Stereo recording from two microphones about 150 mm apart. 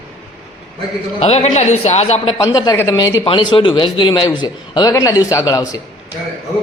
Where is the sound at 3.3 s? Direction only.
35° left (ahead or behind).